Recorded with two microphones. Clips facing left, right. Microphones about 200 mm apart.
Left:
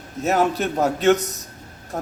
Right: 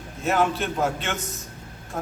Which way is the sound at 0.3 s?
40° left (ahead or behind).